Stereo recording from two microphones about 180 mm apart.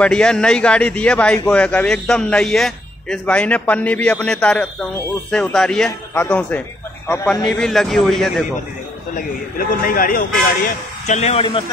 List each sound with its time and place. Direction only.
0.0 s a man's voice: 5° left (ahead or behind)
9.1 s a man's voice: 50° left (ahead or behind); by 11.6 s 35° left (ahead or behind)